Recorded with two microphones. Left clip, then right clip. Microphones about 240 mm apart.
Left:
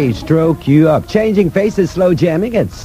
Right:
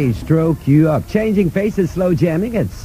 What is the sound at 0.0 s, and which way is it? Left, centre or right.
Speech, right.